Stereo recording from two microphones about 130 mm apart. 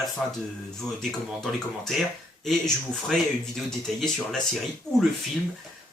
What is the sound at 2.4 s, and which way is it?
Speech, 5° left (ahead or behind).